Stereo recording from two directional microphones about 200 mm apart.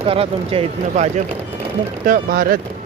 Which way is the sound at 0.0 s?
30° right (ahead or behind).